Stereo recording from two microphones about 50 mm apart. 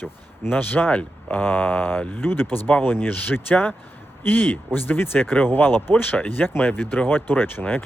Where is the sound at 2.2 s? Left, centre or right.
Left.